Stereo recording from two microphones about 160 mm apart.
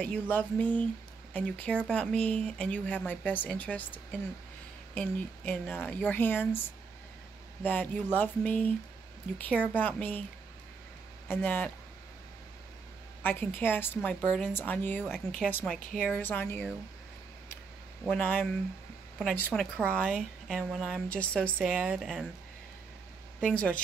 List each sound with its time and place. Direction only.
0.0 s speech: 10° left (ahead or behind)
7.6 s speech: 10° left (ahead or behind)
11.2 s speech: 10° left (ahead or behind)
13.2 s speech: 15° left (ahead or behind)
18.0 s speech: 10° left (ahead or behind)
23.5 s speech: 10° left (ahead or behind)